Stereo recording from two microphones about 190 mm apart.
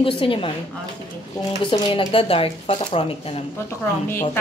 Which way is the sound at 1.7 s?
25° left (ahead or behind).